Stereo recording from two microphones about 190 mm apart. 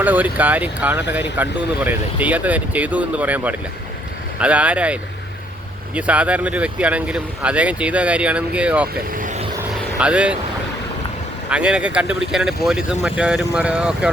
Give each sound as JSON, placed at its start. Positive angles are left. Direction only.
{"t": 0.0, "sound": "speech", "side_deg": -10}
{"t": 9.1, "sound": "vehicle", "side_deg": -45}
{"t": 9.6, "sound": "vehicle", "side_deg": -5}
{"t": 11.4, "sound": "speech", "side_deg": -5}